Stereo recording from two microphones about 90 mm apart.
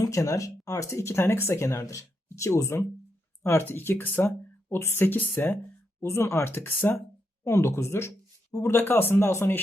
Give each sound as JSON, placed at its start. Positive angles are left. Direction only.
{"t": 0.0, "sound": "speech", "side_deg": 35}
{"t": 8.8, "sound": "speech", "side_deg": 25}